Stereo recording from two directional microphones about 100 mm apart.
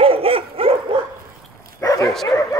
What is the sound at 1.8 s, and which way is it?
Dog, 35° left (ahead or behind).